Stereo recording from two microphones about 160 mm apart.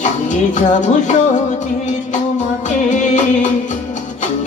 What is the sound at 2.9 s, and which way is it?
Music, 50° left (ahead or behind).